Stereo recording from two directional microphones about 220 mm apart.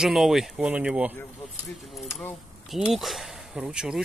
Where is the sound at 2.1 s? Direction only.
10° left (ahead or behind).